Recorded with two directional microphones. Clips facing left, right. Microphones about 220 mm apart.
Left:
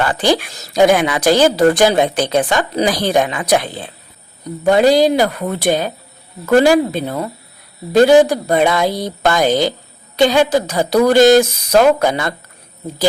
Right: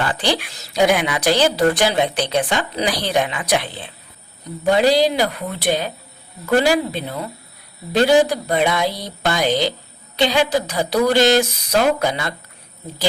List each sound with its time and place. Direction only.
0.1 s a woman's voice: 45° left (ahead or behind)